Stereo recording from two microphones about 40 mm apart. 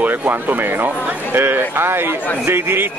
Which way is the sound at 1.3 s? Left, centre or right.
Right.